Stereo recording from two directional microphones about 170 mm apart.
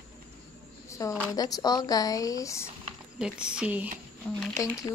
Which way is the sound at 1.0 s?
20° left (ahead or behind).